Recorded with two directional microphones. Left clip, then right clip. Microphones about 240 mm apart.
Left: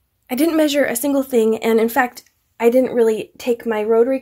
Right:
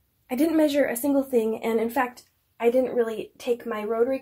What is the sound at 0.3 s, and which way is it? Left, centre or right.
A woman's voice, left.